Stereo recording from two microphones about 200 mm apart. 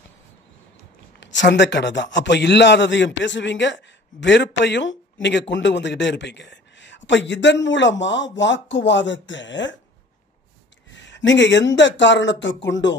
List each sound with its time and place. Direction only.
1.2 s a man's voice: 60° left (ahead or behind)
11.1 s a man's voice: 65° left (ahead or behind)